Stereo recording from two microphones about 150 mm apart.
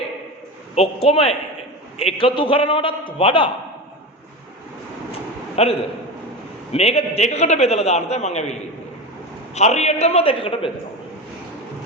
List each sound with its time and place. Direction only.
0.8 s a man's voice: 40° left (ahead or behind)
5.6 s a man's voice: 40° left (ahead or behind)
9.6 s a man's voice: 50° left (ahead or behind)